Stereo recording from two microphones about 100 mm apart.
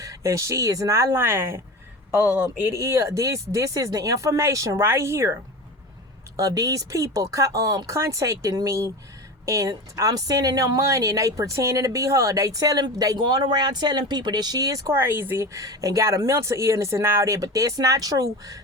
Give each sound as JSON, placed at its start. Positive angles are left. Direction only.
{"t": 0.0, "sound": "speech", "side_deg": -30}
{"t": 2.6, "sound": "a woman's voice", "side_deg": -30}
{"t": 14.8, "sound": "speech", "side_deg": -20}
{"t": 15.5, "sound": "a woman's voice", "side_deg": -35}